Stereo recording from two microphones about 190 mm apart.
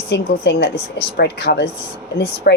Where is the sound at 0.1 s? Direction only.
65° left (ahead or behind).